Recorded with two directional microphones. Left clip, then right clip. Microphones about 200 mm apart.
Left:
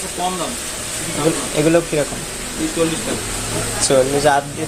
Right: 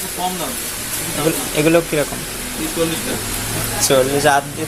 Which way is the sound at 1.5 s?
5° right (ahead or behind).